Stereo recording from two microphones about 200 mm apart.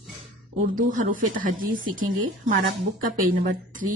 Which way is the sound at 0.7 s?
40° right (ahead or behind).